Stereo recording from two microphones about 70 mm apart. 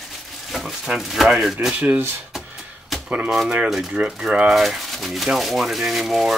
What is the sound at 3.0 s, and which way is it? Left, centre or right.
Speech, right.